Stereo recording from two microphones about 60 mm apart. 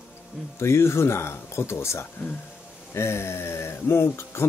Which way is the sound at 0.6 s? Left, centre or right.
Left.